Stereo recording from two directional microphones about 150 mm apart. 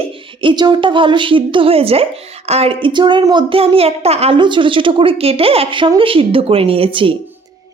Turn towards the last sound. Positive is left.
turn(degrees=-35)  # may be behind; listen again after turning